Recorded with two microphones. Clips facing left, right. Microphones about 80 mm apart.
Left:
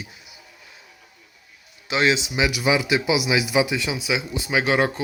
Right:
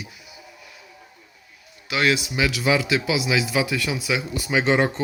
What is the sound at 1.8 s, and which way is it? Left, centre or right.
A man's voice, left.